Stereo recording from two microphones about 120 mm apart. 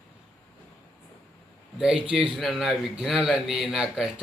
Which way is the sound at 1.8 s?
5° right (ahead or behind).